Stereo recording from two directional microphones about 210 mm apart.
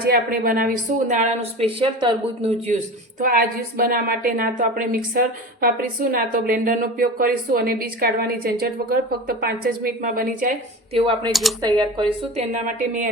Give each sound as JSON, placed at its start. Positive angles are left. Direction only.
{"t": 0.0, "sound": "a woman's voice", "side_deg": -45}
{"t": 3.2, "sound": "a woman's voice", "side_deg": -40}
{"t": 10.9, "sound": "speech", "side_deg": -25}
{"t": 11.3, "sound": "speech", "side_deg": 0}
{"t": 11.6, "sound": "a woman's voice", "side_deg": -20}